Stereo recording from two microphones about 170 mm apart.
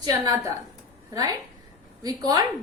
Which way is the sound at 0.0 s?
20° right (ahead or behind).